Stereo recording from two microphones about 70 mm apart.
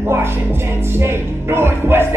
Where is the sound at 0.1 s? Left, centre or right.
Right.